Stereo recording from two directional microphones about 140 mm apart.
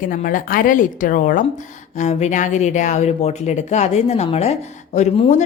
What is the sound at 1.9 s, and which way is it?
Speech, 55° left (ahead or behind).